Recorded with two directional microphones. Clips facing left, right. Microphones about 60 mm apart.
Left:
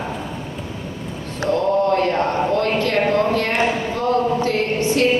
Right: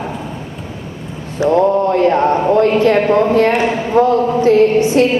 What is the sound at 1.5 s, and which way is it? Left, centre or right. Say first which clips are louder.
Speech: right 4 dB; right.